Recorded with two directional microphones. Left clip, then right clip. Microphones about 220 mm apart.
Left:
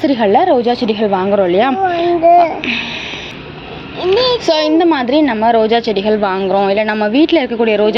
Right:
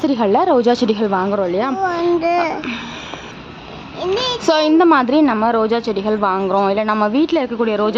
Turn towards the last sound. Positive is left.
turn(degrees=-5)  # may be behind; listen again after turning